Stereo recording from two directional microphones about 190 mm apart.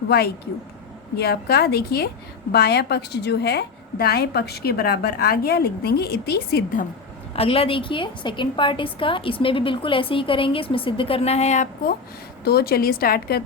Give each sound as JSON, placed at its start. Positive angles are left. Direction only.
{"t": 1.1, "sound": "a woman's voice", "side_deg": 55}
{"t": 7.3, "sound": "a woman's voice", "side_deg": 30}
{"t": 12.5, "sound": "a woman's voice", "side_deg": 55}